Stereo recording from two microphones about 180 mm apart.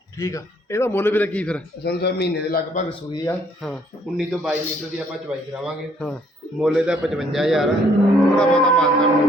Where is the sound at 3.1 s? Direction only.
15° left (ahead or behind).